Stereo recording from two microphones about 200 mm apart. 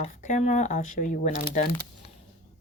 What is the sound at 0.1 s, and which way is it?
Speech, 40° left (ahead or behind).